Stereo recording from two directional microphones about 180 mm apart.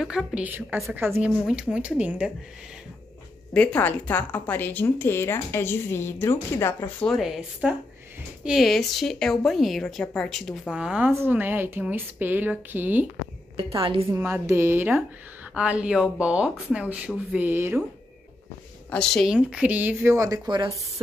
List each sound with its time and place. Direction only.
0.0 s a woman's voice: 5° right (ahead or behind)
3.5 s speech: 10° left (ahead or behind)
7.1 s a woman's voice: 5° right (ahead or behind)
13.7 s a woman's voice: 30° right (ahead or behind)
14.1 s speech: 15° right (ahead or behind)
18.9 s speech: 5° left (ahead or behind); by 20.7 s 25° right (ahead or behind)